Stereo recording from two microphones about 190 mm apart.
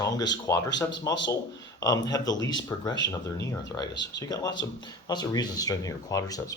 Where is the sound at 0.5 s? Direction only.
15° left (ahead or behind).